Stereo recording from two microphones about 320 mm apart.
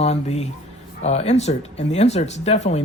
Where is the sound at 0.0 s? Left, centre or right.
Centre.